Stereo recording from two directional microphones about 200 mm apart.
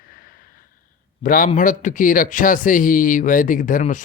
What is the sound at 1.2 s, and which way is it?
A man's voice, 45° left (ahead or behind).